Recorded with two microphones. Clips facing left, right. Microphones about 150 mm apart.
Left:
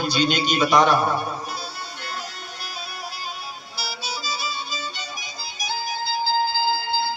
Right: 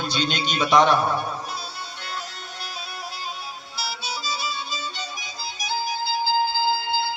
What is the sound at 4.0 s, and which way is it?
Music, 5° left (ahead or behind).